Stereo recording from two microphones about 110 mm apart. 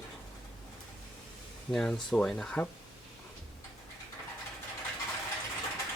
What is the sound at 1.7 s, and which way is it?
Speech, 5° left (ahead or behind).